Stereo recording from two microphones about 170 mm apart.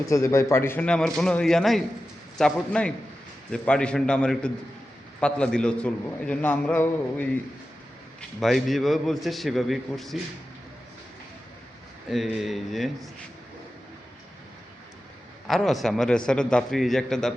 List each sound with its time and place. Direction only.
0.0 s a man's voice: 20° left (ahead or behind)
8.4 s a man's voice: centre (ahead or behind)
12.1 s a man's voice: centre (ahead or behind)
15.4 s a man's voice: centre (ahead or behind)